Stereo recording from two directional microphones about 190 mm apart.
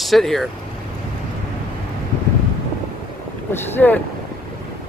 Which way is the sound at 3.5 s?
10° left (ahead or behind).